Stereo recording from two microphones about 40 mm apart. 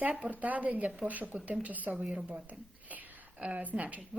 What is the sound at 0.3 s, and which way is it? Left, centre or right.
Speech, right.